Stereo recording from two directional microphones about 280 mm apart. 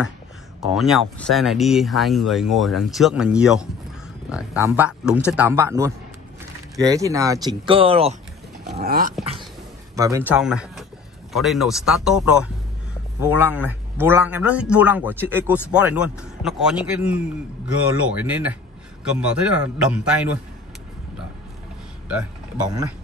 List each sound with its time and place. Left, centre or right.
0.7 s speech: centre; by 8.2 s right
8.7 s dog: right
9.2 s speech: centre